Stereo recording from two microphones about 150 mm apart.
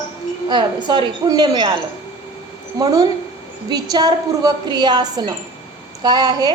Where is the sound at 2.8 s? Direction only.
25° right (ahead or behind).